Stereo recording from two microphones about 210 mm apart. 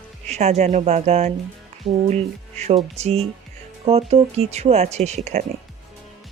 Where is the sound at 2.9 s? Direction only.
30° right (ahead or behind).